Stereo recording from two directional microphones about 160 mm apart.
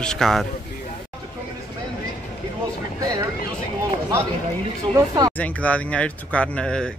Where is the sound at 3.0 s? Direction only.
20° right (ahead or behind).